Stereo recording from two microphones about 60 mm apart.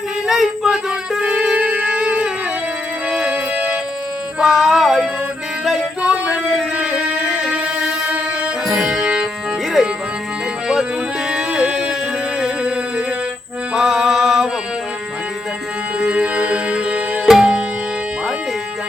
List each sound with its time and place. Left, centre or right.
0.3 s a sound: centre
1.2 s shofar: centre
3.1 s music: centre
4.4 s music: centre
6.0 s music: centre
8.7 s music: centre
11.3 s music: centre
13.7 s mantra: centre
16.0 s music: centre
17.3 s music: centre